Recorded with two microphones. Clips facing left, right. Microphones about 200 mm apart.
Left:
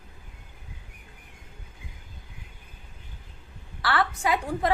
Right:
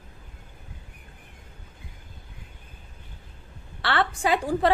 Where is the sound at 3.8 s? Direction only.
25° right (ahead or behind).